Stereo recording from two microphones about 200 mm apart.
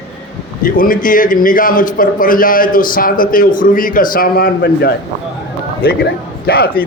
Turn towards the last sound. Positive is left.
turn(degrees=50)  # may be behind; listen again after turning